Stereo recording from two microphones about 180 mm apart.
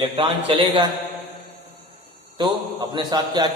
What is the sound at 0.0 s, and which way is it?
Speech, 30° right (ahead or behind).